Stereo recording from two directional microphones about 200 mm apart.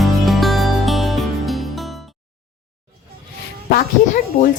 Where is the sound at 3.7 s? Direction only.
50° left (ahead or behind).